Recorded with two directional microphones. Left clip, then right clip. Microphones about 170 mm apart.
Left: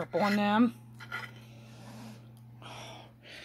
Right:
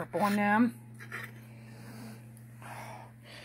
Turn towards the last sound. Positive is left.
turn(degrees=10)  # may be behind; listen again after turning